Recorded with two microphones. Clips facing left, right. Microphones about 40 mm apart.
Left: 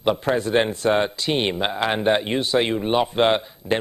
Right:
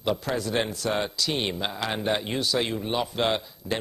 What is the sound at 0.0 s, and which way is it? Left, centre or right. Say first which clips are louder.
A man's voice: left 6 dB; left.